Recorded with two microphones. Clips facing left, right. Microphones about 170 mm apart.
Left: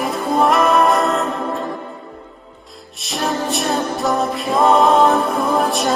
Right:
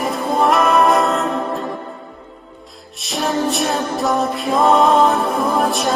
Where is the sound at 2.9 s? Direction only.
Centre (ahead or behind).